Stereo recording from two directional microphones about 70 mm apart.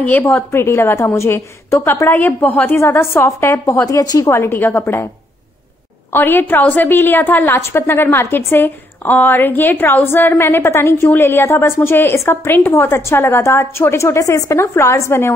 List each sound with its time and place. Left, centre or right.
0.2 s a woman's voice: left
2.1 s a woman's voice: left
2.8 s a woman's voice: left
4.0 s a woman's voice: left
4.3 s a woman's voice: left
6.1 s a woman's voice: left